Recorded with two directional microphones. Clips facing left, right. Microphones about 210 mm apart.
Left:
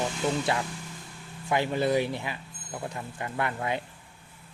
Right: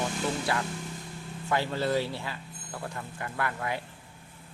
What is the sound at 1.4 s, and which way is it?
Speech, 15° left (ahead or behind).